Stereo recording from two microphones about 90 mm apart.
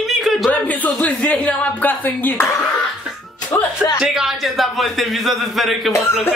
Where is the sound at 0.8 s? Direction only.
15° left (ahead or behind).